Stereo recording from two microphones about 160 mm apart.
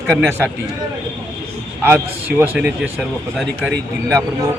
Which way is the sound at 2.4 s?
10° right (ahead or behind).